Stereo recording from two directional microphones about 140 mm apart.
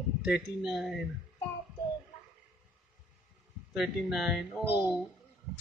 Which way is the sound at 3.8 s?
5° right (ahead or behind).